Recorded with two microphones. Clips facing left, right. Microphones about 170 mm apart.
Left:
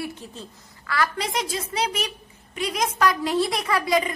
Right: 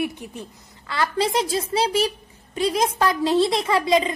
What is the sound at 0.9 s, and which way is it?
A child's voice, 25° right (ahead or behind).